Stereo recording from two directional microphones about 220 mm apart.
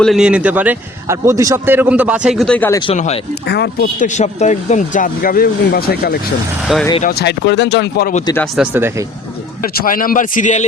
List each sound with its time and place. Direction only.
0.0 s a man's voice: centre (ahead or behind)
2.8 s speech: 30° left (ahead or behind)
3.4 s speech: 50° left (ahead or behind)
8.5 s a man's voice: 10° right (ahead or behind)
9.7 s speech: 40° left (ahead or behind)